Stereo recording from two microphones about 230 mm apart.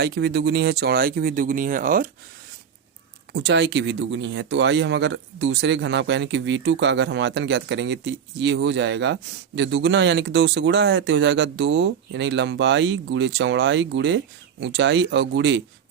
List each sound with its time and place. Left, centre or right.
0.0 s speech: right
3.3 s speech: right